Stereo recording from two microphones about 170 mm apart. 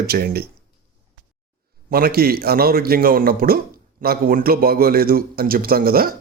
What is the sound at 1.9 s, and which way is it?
Speech, 60° right (ahead or behind).